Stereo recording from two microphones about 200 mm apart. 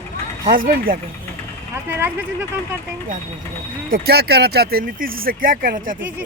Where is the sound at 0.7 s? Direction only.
45° right (ahead or behind).